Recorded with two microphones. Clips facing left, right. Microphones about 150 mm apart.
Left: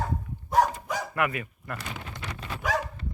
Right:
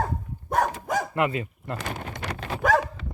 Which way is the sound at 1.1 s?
25° right (ahead or behind).